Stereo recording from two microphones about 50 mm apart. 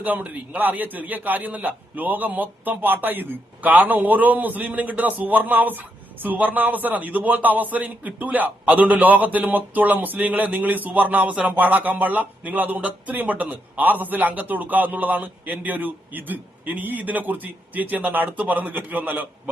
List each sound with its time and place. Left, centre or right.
0.0 s a man's voice: right
11.3 s a sound: right
11.5 s a man's voice: right